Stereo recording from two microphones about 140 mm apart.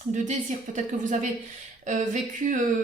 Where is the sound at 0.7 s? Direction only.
65° right (ahead or behind).